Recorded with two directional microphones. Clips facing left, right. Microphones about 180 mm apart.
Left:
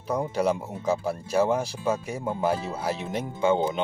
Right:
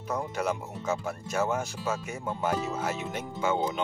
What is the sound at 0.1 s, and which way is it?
Speech, 30° left (ahead or behind).